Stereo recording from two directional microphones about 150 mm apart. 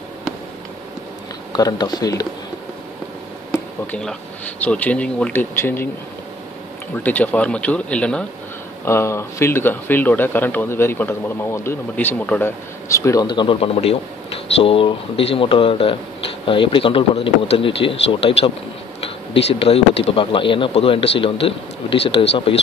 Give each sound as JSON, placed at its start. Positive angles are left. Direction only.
{"t": 1.5, "sound": "speech", "side_deg": 25}
{"t": 3.8, "sound": "speech", "side_deg": 5}
{"t": 7.0, "sound": "speech", "side_deg": 10}
{"t": 8.8, "sound": "speech", "side_deg": 20}